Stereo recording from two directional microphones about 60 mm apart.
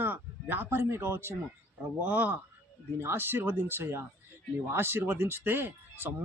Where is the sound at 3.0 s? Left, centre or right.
Right.